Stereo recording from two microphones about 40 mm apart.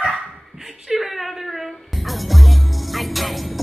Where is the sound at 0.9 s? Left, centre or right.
Centre.